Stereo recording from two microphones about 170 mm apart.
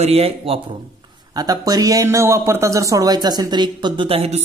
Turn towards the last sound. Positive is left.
turn(degrees=-35)  # may be behind; listen again after turning